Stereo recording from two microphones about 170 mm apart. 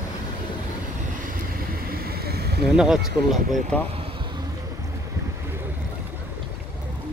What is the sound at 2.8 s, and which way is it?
Speech, centre (ahead or behind).